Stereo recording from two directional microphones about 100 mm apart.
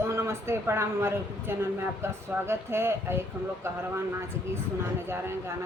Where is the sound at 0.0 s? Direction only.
25° right (ahead or behind).